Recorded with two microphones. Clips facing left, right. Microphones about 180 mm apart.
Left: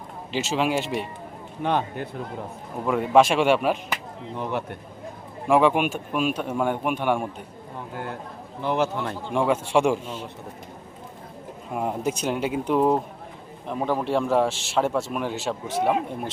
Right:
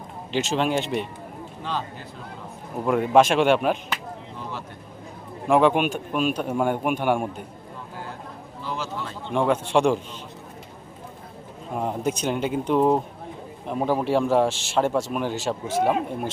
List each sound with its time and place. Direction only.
0.3 s speech: 5° left (ahead or behind)
1.6 s speech: 60° left (ahead or behind)
2.8 s speech: centre (ahead or behind)
5.5 s speech: centre (ahead or behind)
8.6 s speech: 60° left (ahead or behind)
9.3 s speech: 5° left (ahead or behind)
11.7 s speech: 5° left (ahead or behind)